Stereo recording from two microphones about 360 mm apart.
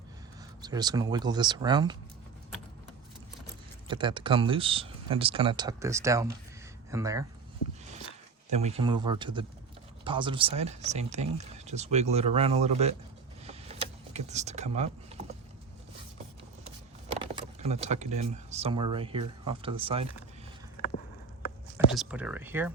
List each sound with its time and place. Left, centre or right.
0.6 s speech: centre
3.8 s speech: centre
8.4 s speech: centre
13.4 s vehicle: centre
17.2 s speech: centre
21.9 s speech: centre